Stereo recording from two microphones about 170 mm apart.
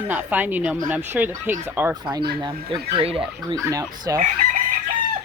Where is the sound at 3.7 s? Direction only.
20° right (ahead or behind).